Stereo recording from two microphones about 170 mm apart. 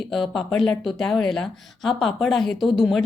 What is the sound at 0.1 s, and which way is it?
A woman's voice, centre (ahead or behind).